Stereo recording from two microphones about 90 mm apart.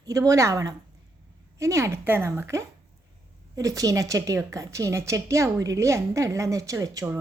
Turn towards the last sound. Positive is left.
turn(degrees=-40)  # may be behind; listen again after turning